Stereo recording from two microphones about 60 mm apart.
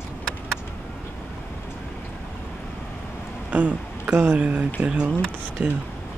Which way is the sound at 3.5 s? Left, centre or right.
Right.